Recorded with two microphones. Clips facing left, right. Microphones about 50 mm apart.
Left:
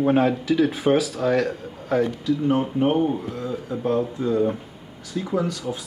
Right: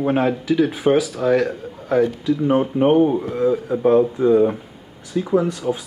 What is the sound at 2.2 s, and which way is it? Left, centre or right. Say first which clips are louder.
Speech: right 3 dB; right.